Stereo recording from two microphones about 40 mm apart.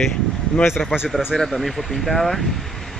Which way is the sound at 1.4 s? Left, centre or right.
Centre.